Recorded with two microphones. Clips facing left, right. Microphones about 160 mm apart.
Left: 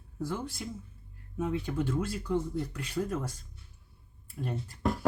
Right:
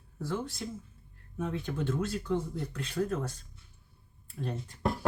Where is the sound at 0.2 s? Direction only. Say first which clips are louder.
Even; 10° left (ahead or behind).